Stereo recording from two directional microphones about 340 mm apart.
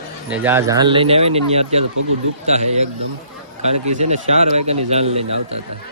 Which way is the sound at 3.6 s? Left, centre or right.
Centre.